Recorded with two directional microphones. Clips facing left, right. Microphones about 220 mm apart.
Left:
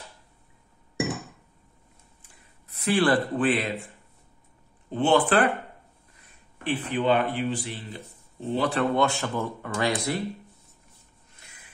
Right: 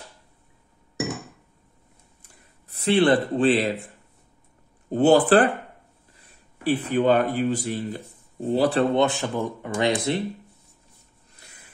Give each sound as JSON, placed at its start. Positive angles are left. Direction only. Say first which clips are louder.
{"t": 2.7, "sound": "speech", "louder": "right 4 dB", "side_deg": -25}
{"t": 4.8, "sound": "speech", "louder": "right 5 dB", "side_deg": -40}
{"t": 6.6, "sound": "speech", "louder": "right 5 dB", "side_deg": -40}
{"t": 8.9, "sound": "speech", "louder": "right 3 dB", "side_deg": -20}